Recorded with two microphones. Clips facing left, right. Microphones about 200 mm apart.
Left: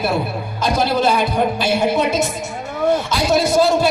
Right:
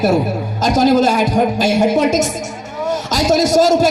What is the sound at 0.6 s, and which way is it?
A man's voice, 45° right (ahead or behind).